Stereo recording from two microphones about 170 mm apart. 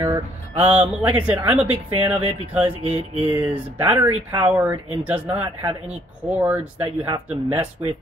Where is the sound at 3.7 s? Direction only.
10° right (ahead or behind).